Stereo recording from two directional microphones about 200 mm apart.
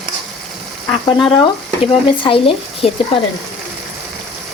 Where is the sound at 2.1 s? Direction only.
25° left (ahead or behind).